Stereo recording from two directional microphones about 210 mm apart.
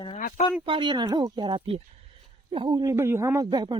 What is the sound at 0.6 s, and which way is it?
Speech, 25° right (ahead or behind).